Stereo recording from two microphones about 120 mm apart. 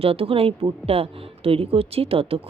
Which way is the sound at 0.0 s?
55° right (ahead or behind).